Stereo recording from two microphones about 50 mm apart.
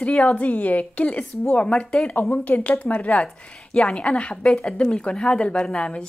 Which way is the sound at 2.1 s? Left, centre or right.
Left.